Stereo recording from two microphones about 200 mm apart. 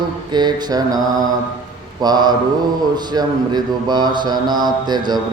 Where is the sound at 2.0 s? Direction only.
20° right (ahead or behind).